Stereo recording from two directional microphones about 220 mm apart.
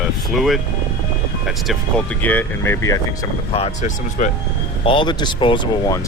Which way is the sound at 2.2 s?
10° left (ahead or behind).